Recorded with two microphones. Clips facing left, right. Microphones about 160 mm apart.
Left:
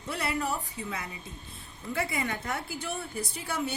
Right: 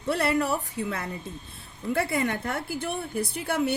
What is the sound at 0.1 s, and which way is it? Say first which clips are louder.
A woman's voice: right 7 dB; 65° right (ahead or behind).